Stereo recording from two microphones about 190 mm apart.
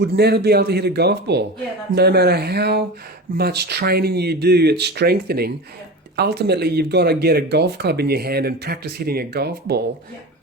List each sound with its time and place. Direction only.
0.1 s speech: 60° right (ahead or behind)